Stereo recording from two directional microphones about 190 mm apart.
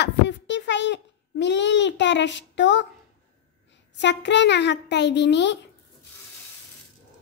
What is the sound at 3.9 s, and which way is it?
A child's voice, 70° left (ahead or behind).